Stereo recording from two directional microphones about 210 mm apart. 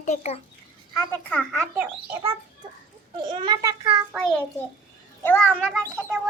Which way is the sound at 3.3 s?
20° right (ahead or behind).